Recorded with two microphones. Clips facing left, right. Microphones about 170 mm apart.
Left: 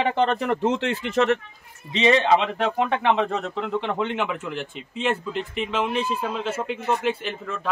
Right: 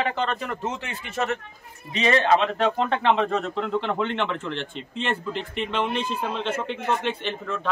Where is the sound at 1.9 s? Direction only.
20° left (ahead or behind).